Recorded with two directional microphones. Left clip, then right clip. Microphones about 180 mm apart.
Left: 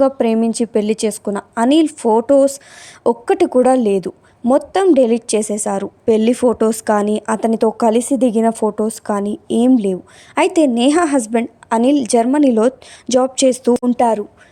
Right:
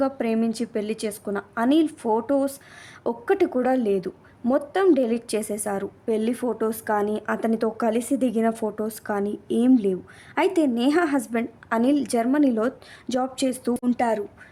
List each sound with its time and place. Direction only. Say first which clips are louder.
0.0 s a woman's voice: left 10 dB; 35° left (ahead or behind)